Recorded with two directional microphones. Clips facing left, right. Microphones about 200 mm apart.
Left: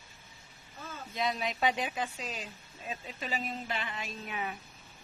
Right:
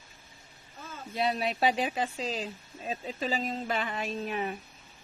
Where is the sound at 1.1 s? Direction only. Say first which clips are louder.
Right 4 dB; 35° right (ahead or behind).